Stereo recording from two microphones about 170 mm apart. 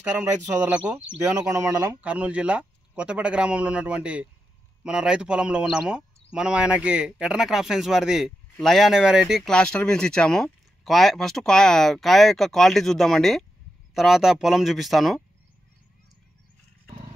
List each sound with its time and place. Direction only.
0.2 s speech: 10° right (ahead or behind)
1.5 s speech: 20° right (ahead or behind)
2.0 s speech: 5° right (ahead or behind)